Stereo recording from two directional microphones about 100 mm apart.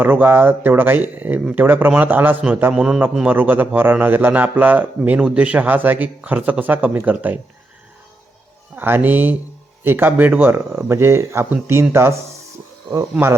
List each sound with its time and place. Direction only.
0.0 s speech: 20° right (ahead or behind)
2.7 s speech: 10° right (ahead or behind)
3.2 s speech: 20° right (ahead or behind)
8.7 s speech: 20° right (ahead or behind)